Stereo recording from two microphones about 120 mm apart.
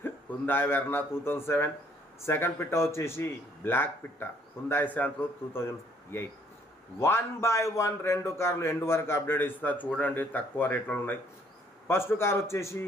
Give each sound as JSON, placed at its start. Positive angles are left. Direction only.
{"t": 0.0, "sound": "a man's voice", "side_deg": 15}